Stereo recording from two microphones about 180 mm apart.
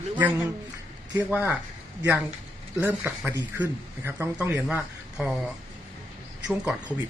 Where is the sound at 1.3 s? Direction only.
10° right (ahead or behind).